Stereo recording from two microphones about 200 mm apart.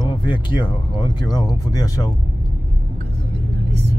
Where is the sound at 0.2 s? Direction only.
25° left (ahead or behind).